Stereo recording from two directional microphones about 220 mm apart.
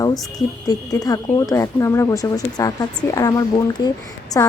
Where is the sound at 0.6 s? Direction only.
15° left (ahead or behind).